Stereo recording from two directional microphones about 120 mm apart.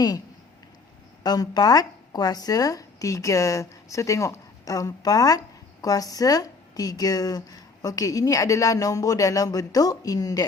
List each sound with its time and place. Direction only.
1.2 s a woman's voice: 35° left (ahead or behind)